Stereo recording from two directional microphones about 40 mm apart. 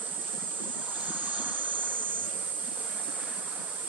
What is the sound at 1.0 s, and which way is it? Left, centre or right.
Waves, right.